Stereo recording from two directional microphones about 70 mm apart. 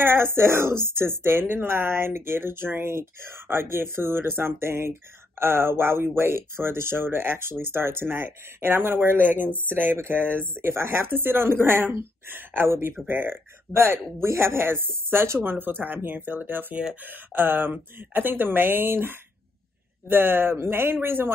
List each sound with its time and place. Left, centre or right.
0.0 s speech: right